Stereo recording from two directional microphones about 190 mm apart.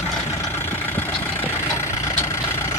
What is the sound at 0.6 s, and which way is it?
Vehicle, 10° left (ahead or behind).